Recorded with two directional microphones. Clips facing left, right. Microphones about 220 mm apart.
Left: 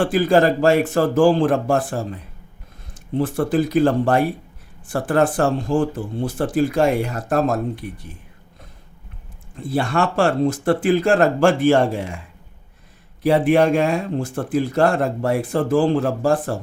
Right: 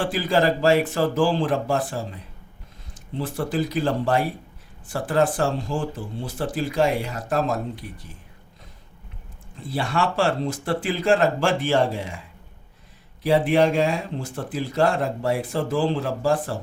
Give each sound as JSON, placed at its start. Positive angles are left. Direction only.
{"t": 0.0, "sound": "speech", "side_deg": 50}
{"t": 3.2, "sound": "speech", "side_deg": 55}
{"t": 9.7, "sound": "speech", "side_deg": 50}
{"t": 13.2, "sound": "speech", "side_deg": 55}